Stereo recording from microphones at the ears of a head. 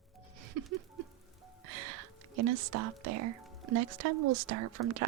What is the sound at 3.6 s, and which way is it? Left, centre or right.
Speech, right.